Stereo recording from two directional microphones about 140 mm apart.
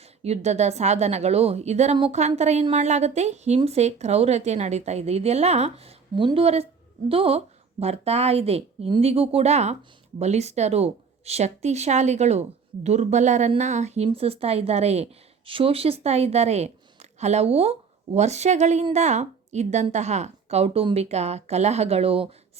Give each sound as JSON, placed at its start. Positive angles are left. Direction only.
{"t": 0.2, "sound": "a woman's voice", "side_deg": -50}